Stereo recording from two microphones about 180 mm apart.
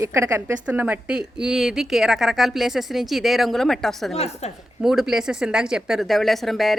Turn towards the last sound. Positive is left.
turn(degrees=0)  # may be behind; listen again after turning